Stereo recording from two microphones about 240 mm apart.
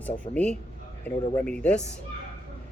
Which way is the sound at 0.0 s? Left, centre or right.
Centre.